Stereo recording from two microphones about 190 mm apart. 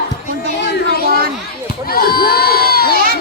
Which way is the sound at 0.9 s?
55° right (ahead or behind).